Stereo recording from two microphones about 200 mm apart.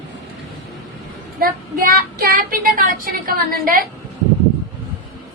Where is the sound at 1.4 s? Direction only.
45° right (ahead or behind).